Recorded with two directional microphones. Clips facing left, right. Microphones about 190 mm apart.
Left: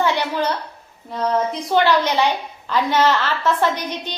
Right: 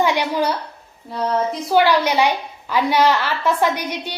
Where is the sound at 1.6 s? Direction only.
10° right (ahead or behind).